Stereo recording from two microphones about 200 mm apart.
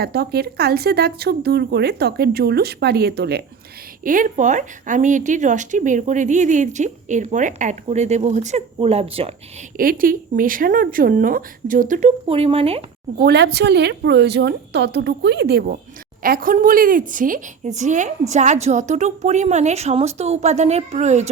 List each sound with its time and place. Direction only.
0.0 s speech: 55° right (ahead or behind)
4.0 s a woman's voice: 40° right (ahead or behind)
9.7 s speech: 45° right (ahead or behind); by 12.8 s 30° right (ahead or behind)
13.1 s a woman's voice: 55° right (ahead or behind); by 21.2 s 35° right (ahead or behind)